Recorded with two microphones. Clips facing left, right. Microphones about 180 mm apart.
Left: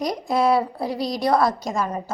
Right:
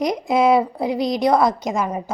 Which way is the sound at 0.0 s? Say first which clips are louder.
Right 3 dB; 20° right (ahead or behind).